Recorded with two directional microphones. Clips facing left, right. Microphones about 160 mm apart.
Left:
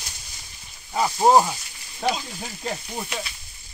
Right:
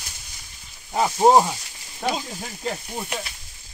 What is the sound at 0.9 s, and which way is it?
Speech, 15° right (ahead or behind).